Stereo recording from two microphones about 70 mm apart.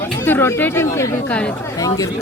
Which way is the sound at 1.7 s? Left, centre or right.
Left.